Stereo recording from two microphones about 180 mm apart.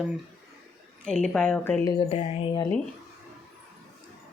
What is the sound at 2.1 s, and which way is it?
Speech, 25° left (ahead or behind).